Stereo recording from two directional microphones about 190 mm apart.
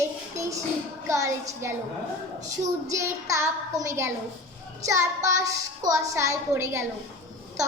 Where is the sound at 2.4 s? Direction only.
40° right (ahead or behind).